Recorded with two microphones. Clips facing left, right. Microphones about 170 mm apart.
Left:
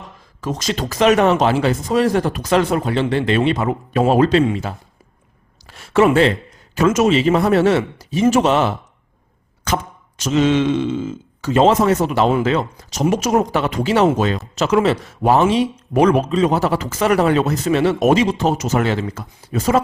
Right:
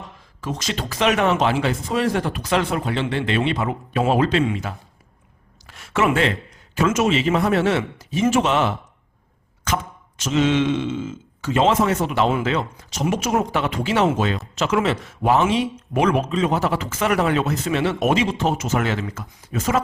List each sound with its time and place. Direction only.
0.4 s speech: 40° left (ahead or behind)
5.6 s a sound: 35° left (ahead or behind)
6.7 s speech: 40° left (ahead or behind)